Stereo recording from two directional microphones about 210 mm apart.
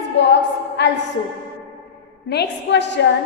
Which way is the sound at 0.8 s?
55° left (ahead or behind).